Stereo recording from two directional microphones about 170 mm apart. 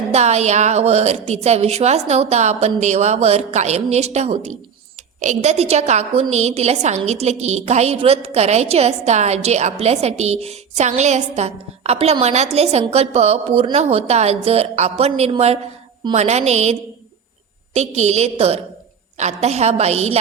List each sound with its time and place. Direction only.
0.1 s a woman's voice: 40° right (ahead or behind)
17.7 s a woman's voice: 40° right (ahead or behind)